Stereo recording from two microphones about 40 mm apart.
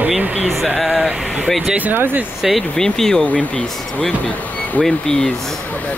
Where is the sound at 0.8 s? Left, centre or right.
Centre.